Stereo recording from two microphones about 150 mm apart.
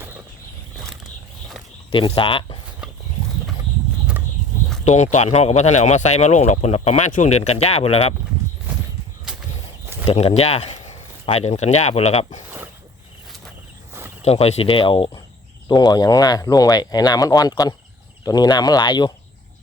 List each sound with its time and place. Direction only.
1.9 s speech: 35° left (ahead or behind)
5.1 s speech: 45° left (ahead or behind)
10.1 s speech: 40° left (ahead or behind)
14.2 s speech: 45° left (ahead or behind); by 19.1 s 30° left (ahead or behind)